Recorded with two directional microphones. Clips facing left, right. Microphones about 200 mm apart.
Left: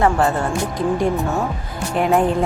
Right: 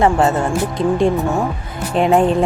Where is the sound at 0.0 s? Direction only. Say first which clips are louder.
Right 3 dB; 20° right (ahead or behind).